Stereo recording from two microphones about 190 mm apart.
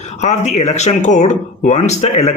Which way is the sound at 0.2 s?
35° left (ahead or behind).